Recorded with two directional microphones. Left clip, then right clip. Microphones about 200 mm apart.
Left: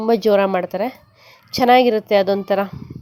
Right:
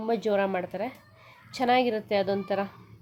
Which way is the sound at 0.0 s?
30° left (ahead or behind).